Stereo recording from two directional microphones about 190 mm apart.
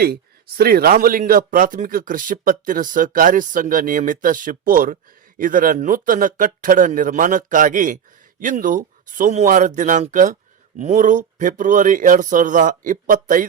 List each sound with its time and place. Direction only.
0.0 s speech: 55° right (ahead or behind)